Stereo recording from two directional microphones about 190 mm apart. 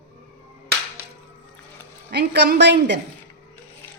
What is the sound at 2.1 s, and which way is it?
Speech, 60° right (ahead or behind).